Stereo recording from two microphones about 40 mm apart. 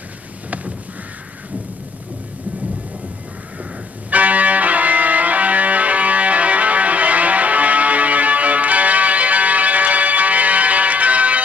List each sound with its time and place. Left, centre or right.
4.1 s music: right